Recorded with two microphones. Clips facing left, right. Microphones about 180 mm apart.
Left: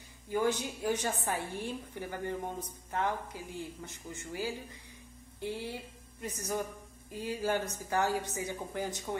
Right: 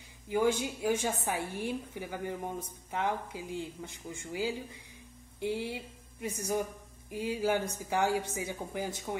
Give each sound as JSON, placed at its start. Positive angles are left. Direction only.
{"t": 0.3, "sound": "a woman's voice", "side_deg": -10}